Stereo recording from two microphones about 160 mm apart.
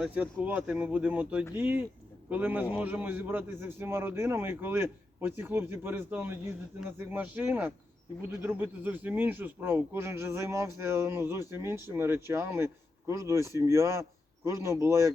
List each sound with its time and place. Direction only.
0.0 s speech: 10° right (ahead or behind)